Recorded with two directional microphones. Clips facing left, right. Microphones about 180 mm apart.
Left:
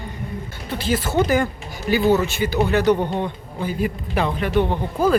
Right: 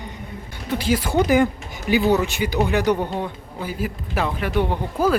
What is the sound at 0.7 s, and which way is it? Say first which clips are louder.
Speech: right 1 dB; 10° right (ahead or behind).